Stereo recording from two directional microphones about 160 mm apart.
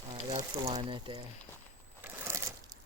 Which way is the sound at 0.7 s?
35° right (ahead or behind).